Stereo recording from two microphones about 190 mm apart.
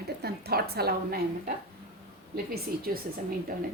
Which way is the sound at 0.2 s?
55° right (ahead or behind).